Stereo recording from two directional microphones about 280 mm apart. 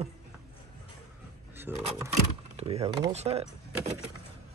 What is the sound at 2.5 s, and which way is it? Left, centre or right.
Speech, right.